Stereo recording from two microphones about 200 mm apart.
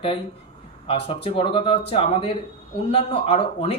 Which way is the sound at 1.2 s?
30° left (ahead or behind).